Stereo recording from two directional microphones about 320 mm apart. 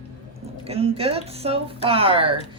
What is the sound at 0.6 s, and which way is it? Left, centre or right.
Speech, centre.